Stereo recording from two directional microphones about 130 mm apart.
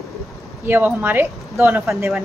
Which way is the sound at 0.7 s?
15° right (ahead or behind).